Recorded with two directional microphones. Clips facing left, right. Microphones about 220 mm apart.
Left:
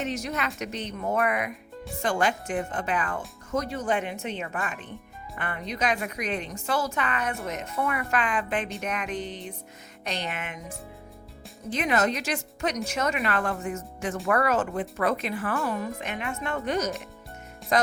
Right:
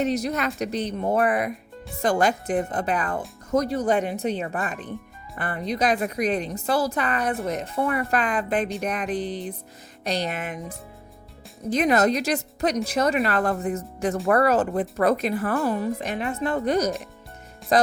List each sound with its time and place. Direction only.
0.0 s speech: 35° right (ahead or behind)